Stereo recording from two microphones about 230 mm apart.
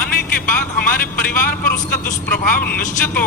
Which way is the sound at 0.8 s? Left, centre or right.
Left.